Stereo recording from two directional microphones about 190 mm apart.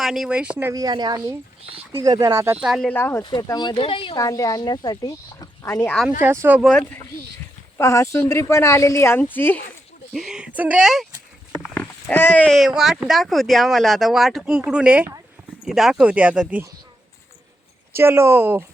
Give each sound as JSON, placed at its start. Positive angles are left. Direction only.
{"t": 0.0, "sound": "speech", "side_deg": 0}
{"t": 0.7, "sound": "speech", "side_deg": -20}
{"t": 2.9, "sound": "speech", "side_deg": 10}
{"t": 6.1, "sound": "speech", "side_deg": -10}
{"t": 6.6, "sound": "speech", "side_deg": 5}
{"t": 10.1, "sound": "speech", "side_deg": 0}
{"t": 11.6, "sound": "speech", "side_deg": 5}
{"t": 17.9, "sound": "speech", "side_deg": -10}